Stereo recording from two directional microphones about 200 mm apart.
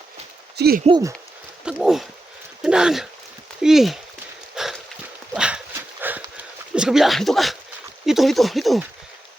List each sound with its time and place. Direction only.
0.5 s speech: 55° right (ahead or behind)
0.9 s speech: 20° right (ahead or behind)
1.6 s speech: 5° right (ahead or behind)
4.5 s a sound: centre (ahead or behind)
5.3 s dog: 5° right (ahead or behind)
6.0 s horse: 10° right (ahead or behind)
6.7 s speech: 5° right (ahead or behind)